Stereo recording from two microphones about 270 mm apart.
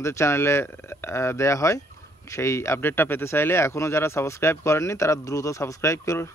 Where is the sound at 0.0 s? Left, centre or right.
Centre.